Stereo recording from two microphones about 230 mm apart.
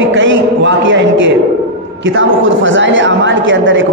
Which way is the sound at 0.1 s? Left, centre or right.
Right.